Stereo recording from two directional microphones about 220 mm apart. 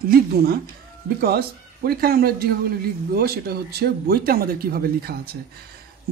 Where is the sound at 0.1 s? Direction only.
45° right (ahead or behind).